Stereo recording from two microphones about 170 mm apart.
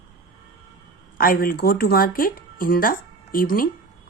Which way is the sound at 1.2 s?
60° left (ahead or behind).